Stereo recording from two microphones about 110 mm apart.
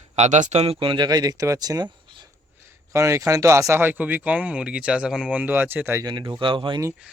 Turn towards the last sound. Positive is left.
turn(degrees=-50)  # may be behind; listen again after turning